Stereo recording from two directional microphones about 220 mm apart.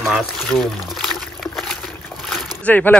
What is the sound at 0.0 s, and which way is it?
Liquid, centre (ahead or behind).